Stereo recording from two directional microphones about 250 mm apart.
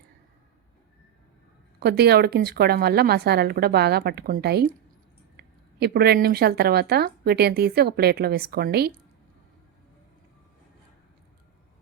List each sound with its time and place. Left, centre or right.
1.8 s speech: right